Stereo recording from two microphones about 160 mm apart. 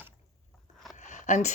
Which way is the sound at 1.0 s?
50° left (ahead or behind).